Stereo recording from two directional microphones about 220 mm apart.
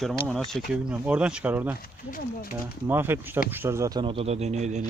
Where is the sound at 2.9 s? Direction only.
10° right (ahead or behind).